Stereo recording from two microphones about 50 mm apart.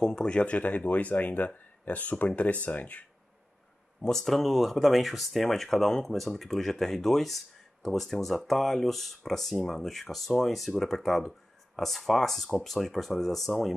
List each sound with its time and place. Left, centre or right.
0.0 s speech: centre
0.6 s speech: left
4.0 s speech: centre